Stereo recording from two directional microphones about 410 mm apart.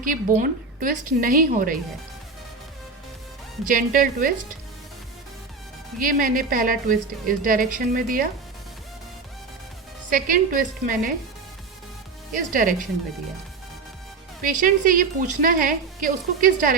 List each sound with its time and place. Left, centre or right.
0.0 s a woman's voice: centre
3.7 s a woman's voice: centre
6.0 s a woman's voice: centre
10.1 s a woman's voice: centre
12.5 s a woman's voice: centre
14.6 s a woman's voice: centre